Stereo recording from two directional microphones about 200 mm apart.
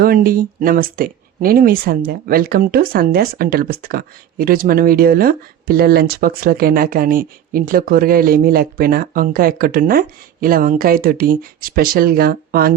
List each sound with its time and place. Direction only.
0.0 s speech: 45° right (ahead or behind)